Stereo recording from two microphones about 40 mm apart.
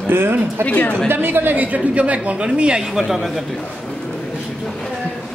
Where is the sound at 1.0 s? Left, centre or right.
Right.